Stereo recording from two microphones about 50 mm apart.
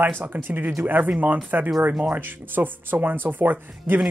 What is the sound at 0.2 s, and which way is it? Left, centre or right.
Speech, right.